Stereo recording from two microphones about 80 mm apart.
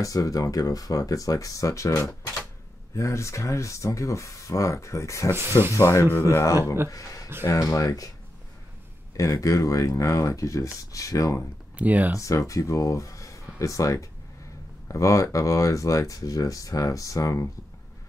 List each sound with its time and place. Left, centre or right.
0.0 s speech: left
9.1 s speech: left
11.8 s speech: centre
12.2 s speech: left